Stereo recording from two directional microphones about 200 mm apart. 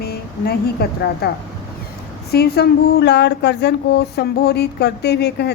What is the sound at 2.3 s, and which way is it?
Speech, 55° left (ahead or behind).